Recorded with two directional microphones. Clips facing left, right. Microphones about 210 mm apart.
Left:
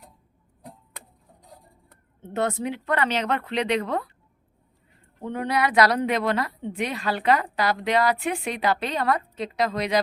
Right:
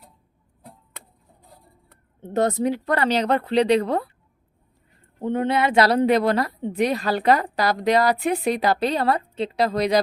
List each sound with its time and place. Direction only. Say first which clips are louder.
2.2 s a woman's voice: right 5 dB; 40° right (ahead or behind)
5.2 s a woman's voice: right 4 dB; 25° right (ahead or behind)